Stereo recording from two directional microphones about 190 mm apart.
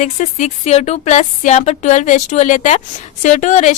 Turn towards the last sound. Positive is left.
turn(degrees=40)  # may be behind; listen again after turning